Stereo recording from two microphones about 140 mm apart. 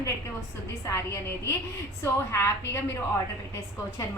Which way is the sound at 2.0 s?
15° left (ahead or behind).